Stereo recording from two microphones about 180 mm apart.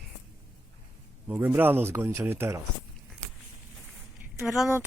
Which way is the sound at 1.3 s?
10° right (ahead or behind).